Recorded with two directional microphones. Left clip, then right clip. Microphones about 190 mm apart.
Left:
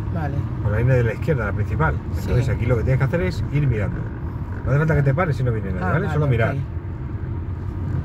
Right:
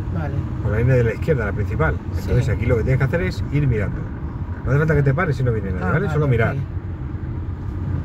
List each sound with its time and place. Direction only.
0.7 s speech: 20° right (ahead or behind)